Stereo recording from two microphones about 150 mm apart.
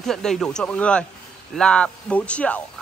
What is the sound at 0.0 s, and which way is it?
Speech, 5° left (ahead or behind).